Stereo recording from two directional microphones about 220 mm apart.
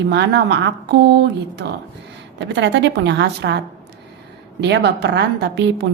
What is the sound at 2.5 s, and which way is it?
A woman's voice, 55° right (ahead or behind).